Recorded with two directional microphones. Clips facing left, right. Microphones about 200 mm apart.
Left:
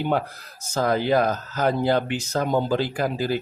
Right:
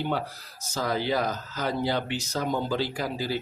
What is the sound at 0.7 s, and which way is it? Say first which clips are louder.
Speech: left 6 dB; 50° left (ahead or behind).